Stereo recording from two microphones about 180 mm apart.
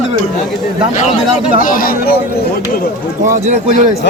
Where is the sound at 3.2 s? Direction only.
45° right (ahead or behind).